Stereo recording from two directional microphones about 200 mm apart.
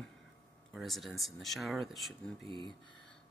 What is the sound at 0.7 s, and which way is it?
Speech, centre (ahead or behind).